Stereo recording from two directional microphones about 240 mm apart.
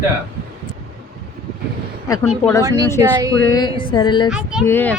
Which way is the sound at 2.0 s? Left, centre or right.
Centre.